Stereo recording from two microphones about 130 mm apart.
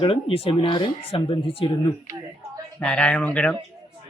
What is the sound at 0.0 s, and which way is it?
Speech, 45° left (ahead or behind).